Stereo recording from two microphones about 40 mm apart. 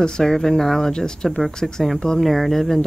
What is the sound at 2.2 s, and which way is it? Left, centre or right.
Speech, centre.